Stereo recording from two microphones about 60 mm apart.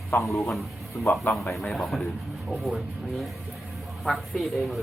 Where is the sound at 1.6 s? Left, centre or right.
Centre.